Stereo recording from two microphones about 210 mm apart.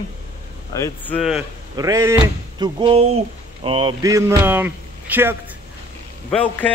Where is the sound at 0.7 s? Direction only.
10° left (ahead or behind).